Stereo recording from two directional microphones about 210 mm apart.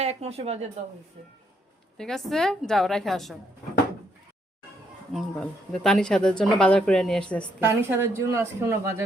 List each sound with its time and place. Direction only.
0.0 s speech: 30° right (ahead or behind)
2.0 s speech: centre (ahead or behind)
5.1 s speech: 5° left (ahead or behind)
7.6 s speech: 10° right (ahead or behind)